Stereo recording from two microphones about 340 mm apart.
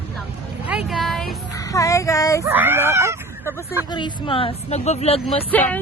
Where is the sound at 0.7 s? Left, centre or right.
Centre.